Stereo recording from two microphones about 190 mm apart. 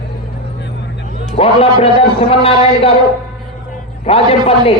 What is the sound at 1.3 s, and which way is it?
A man's voice, 30° left (ahead or behind).